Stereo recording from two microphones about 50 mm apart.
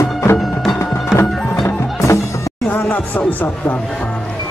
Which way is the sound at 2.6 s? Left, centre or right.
Left.